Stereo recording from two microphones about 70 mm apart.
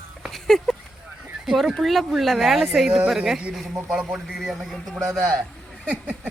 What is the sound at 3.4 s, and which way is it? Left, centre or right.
Speech, centre.